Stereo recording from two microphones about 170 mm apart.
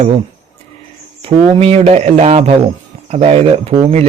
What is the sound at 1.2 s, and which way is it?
A man's voice, 35° right (ahead or behind).